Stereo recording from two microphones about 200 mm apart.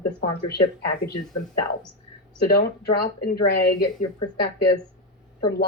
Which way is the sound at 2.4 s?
50° left (ahead or behind).